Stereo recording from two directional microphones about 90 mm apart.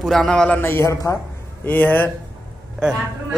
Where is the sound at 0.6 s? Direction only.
30° left (ahead or behind).